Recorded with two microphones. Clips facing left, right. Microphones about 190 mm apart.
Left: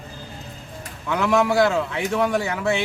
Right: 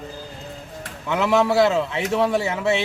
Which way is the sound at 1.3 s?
25° right (ahead or behind).